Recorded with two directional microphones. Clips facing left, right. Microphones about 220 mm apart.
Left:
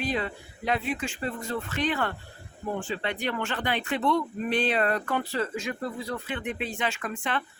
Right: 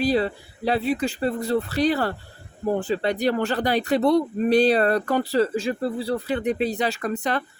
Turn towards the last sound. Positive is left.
turn(degrees=-40)  # may be behind; listen again after turning